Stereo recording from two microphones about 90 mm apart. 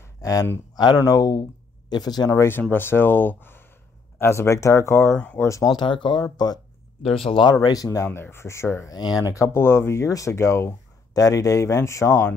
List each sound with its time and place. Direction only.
0.0 s a sound: 35° left (ahead or behind)
0.9 s speech: 40° left (ahead or behind)
2.3 s speech: 25° left (ahead or behind)
5.7 s speech: 60° left (ahead or behind)
7.0 s speech: 90° left
7.6 s speech: 40° left (ahead or behind)
8.9 s speech: 45° left (ahead or behind); by 10.7 s 30° left (ahead or behind)
11.1 s speech: 40° left (ahead or behind)